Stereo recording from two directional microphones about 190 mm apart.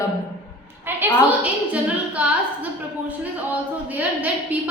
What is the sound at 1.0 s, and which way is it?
A woman's voice, 5° right (ahead or behind).